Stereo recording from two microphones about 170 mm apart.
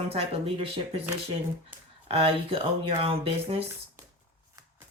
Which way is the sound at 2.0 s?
35° right (ahead or behind).